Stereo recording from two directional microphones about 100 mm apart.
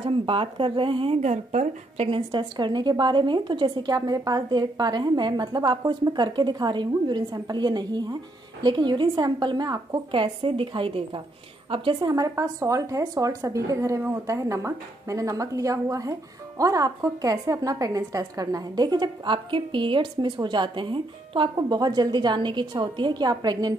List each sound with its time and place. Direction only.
0.0 s speech: 55° right (ahead or behind)
2.5 s a woman's voice: 50° right (ahead or behind)
12.0 s a woman's voice: 35° right (ahead or behind); by 21.5 s 55° right (ahead or behind)
21.5 s a woman's voice: 45° right (ahead or behind)